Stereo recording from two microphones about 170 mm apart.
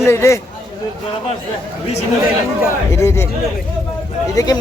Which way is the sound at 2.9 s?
15° left (ahead or behind).